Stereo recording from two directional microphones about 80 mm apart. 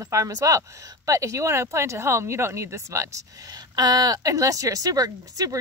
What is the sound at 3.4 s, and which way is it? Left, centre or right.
Speech, right.